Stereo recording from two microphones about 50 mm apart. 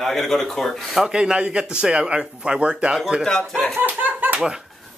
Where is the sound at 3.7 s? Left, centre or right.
Right.